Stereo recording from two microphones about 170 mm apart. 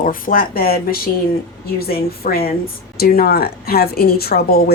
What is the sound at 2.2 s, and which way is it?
A woman's voice, 60° left (ahead or behind).